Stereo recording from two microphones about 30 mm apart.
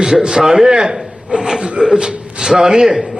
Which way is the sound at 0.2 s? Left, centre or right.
Right.